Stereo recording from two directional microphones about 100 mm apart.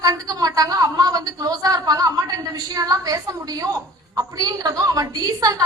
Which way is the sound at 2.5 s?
40° right (ahead or behind).